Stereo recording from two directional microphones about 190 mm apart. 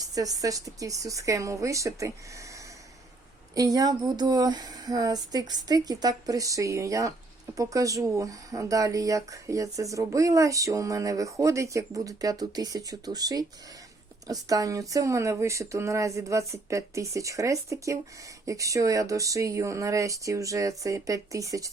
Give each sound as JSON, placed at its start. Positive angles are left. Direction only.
{"t": 0.0, "sound": "speech", "side_deg": -20}
{"t": 3.5, "sound": "speech", "side_deg": -20}